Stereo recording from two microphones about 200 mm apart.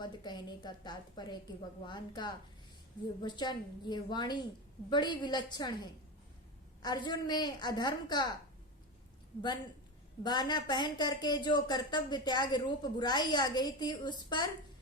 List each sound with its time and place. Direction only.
0.0 s speech: 20° left (ahead or behind)
10.2 s speech: 20° left (ahead or behind)